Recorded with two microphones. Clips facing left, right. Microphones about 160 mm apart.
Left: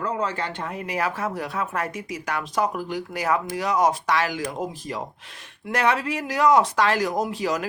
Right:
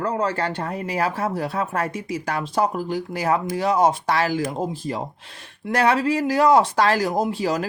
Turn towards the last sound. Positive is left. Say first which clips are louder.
# right 3 dB
turn(degrees=-30)  # may be behind; listen again after turning